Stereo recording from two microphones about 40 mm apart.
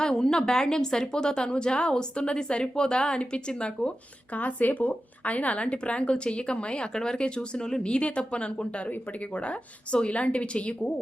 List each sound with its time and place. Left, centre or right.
0.0 s a woman's voice: centre
4.4 s a woman's voice: left